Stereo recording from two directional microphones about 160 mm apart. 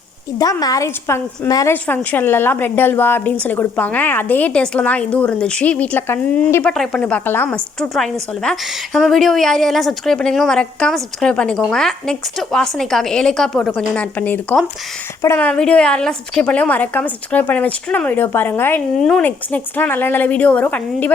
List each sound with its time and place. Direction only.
0.3 s a woman's voice: 20° left (ahead or behind)
18.9 s a woman's voice: 5° left (ahead or behind)